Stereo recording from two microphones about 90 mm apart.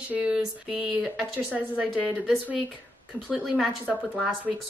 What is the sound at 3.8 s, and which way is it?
Speech, 15° left (ahead or behind).